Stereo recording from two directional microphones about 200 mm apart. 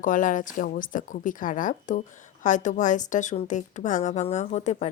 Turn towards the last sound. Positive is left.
turn(degrees=35)  # may be behind; listen again after turning